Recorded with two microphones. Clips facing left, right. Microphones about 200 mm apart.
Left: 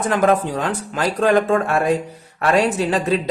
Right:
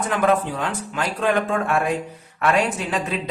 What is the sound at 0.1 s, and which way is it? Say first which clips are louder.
Speech: left 3 dB; 40° left (ahead or behind).